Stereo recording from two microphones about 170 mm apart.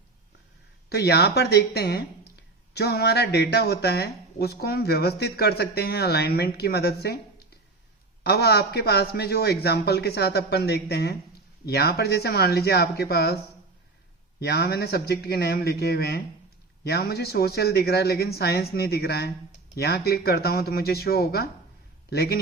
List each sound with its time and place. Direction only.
0.9 s speech: 75° left (ahead or behind)
8.2 s speech: 70° left (ahead or behind)